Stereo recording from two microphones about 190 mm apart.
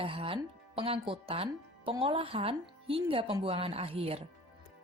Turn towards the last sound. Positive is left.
turn(degrees=-30)  # may be behind; listen again after turning